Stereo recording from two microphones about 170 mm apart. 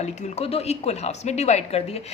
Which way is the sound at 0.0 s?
40° left (ahead or behind).